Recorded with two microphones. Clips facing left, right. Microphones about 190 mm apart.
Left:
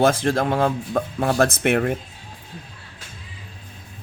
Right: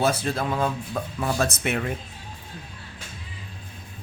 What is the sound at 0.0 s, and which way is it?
Speech, 50° left (ahead or behind).